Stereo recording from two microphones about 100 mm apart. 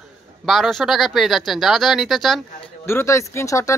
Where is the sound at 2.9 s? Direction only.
25° left (ahead or behind).